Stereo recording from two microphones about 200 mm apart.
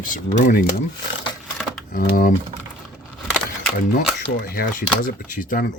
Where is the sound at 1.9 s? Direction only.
45° left (ahead or behind).